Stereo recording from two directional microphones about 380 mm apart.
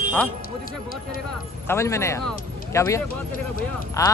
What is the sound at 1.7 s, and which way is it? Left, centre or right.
Speech, centre.